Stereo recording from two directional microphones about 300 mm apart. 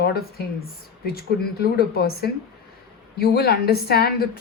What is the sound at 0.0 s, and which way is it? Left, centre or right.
Speech, left.